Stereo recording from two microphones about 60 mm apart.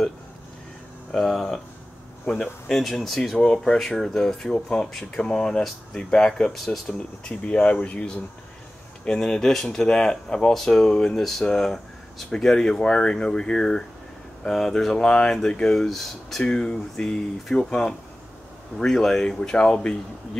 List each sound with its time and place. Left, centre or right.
1.1 s speech: centre
2.7 s speech: centre
3.3 s speech: centre
6.5 s speech: centre
6.9 s speech: left